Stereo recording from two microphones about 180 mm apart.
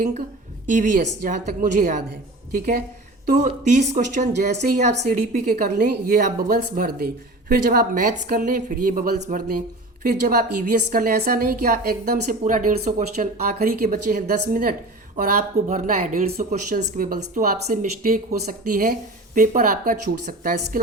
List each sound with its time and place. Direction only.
0.7 s a woman's voice: 45° right (ahead or behind)
10.0 s a woman's voice: 55° right (ahead or behind)